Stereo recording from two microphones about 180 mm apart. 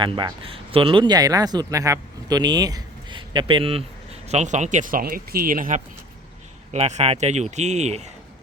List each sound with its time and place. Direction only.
0.0 s speech: 25° right (ahead or behind); by 5.8 s 50° right (ahead or behind)
6.7 s speech: 35° right (ahead or behind)